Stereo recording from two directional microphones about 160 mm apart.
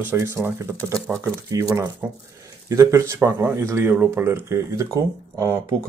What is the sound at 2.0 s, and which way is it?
Speech, 10° right (ahead or behind).